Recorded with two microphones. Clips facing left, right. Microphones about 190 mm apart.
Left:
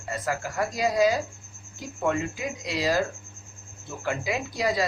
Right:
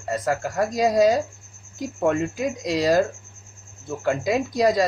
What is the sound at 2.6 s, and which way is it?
Speech, 40° right (ahead or behind).